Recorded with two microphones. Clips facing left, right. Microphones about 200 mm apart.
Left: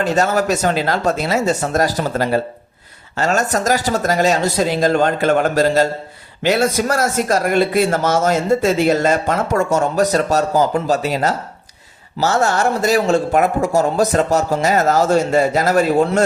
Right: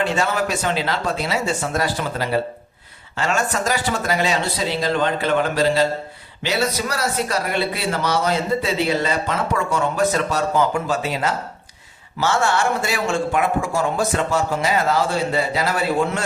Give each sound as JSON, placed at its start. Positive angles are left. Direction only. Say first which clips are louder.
{"t": 0.0, "sound": "a man's voice", "louder": "left 5 dB", "side_deg": 40}